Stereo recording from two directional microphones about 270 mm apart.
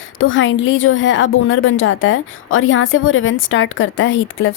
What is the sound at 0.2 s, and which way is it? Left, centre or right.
Speech, left.